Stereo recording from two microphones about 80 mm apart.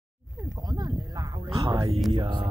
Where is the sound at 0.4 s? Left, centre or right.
Right.